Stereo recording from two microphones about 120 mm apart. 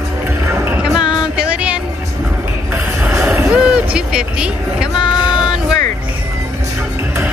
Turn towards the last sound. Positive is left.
turn(degrees=-5)  # may be behind; listen again after turning